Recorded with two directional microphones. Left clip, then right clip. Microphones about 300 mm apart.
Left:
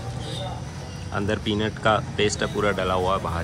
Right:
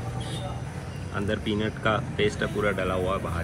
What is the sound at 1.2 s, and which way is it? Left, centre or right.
Speech, centre.